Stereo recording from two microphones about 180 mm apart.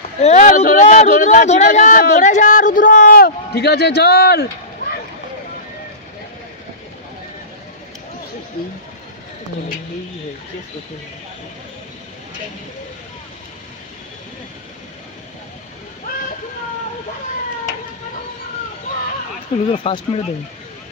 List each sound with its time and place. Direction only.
0.2 s a man's voice: 40° left (ahead or behind); by 4.5 s 60° left (ahead or behind)
19.7 s speech: 30° left (ahead or behind)